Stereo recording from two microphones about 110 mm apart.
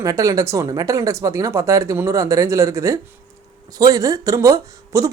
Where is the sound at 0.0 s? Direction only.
30° right (ahead or behind).